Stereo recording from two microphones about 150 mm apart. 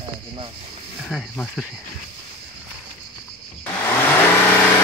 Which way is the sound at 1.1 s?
Centre (ahead or behind).